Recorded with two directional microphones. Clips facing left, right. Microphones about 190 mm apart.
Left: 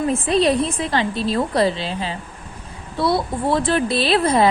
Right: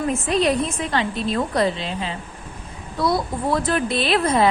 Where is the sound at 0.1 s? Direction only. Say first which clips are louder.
Left 2 dB; 35° left (ahead or behind).